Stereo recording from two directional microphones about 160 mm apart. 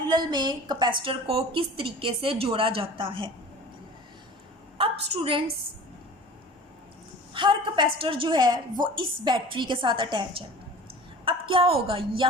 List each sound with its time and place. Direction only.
0.0 s a woman's voice: 25° right (ahead or behind)
4.8 s a woman's voice: 35° right (ahead or behind)
7.3 s a woman's voice: 30° right (ahead or behind)